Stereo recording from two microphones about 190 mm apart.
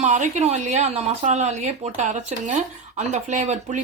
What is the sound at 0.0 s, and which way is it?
Speech, 40° right (ahead or behind).